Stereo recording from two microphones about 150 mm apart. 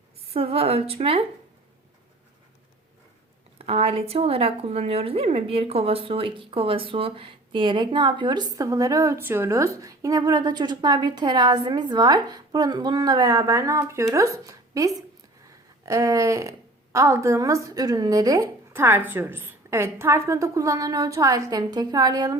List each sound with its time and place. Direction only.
0.3 s a woman's voice: 40° right (ahead or behind)
3.7 s a woman's voice: 40° right (ahead or behind); by 22.4 s 25° right (ahead or behind)